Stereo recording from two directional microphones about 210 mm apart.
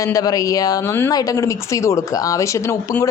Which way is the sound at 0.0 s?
15° left (ahead or behind).